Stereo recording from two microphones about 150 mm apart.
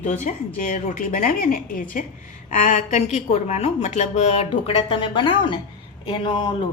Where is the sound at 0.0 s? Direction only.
55° left (ahead or behind); by 6.5 s 35° left (ahead or behind).